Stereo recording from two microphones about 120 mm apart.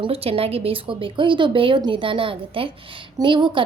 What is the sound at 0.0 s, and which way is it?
A woman's voice, 55° right (ahead or behind).